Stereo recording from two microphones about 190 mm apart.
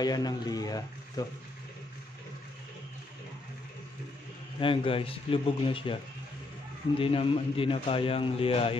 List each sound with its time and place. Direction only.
0.0 s a man's voice: 20° left (ahead or behind)
4.6 s a man's voice: 30° left (ahead or behind)
7.0 s a man's voice: 30° left (ahead or behind)